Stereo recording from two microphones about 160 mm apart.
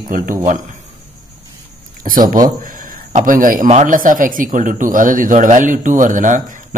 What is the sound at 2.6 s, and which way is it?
Speech, 55° right (ahead or behind).